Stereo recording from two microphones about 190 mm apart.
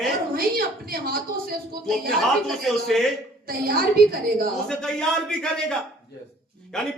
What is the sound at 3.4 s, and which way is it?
A woman's voice, 55° right (ahead or behind).